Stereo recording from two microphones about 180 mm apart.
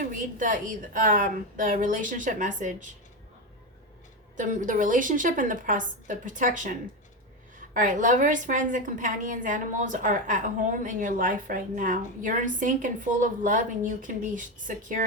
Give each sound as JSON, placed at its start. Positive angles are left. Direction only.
{"t": 0.0, "sound": "a woman's voice", "side_deg": -50}
{"t": 4.4, "sound": "a woman's voice", "side_deg": -45}